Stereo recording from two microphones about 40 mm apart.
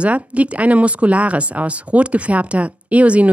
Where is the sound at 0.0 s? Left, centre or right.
Right.